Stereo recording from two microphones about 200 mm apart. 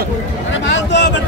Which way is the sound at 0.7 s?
60° left (ahead or behind).